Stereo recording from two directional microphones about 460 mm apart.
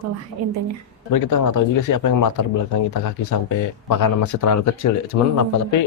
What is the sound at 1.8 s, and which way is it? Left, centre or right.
Speech, left.